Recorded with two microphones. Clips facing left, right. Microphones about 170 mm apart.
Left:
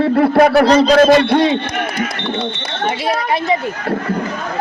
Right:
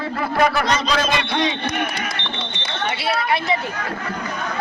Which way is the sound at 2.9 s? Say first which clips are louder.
Left 4 dB; 45° left (ahead or behind).